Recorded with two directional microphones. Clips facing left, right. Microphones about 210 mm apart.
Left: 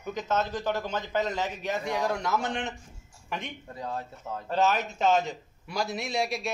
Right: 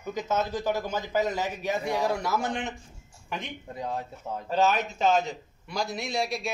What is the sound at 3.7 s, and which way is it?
Speech, 20° right (ahead or behind).